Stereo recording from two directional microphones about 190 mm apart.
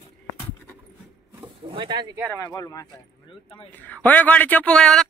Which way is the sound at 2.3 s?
20° left (ahead or behind).